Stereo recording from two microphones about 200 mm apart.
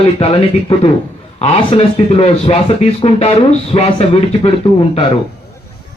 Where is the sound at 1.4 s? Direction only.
30° left (ahead or behind).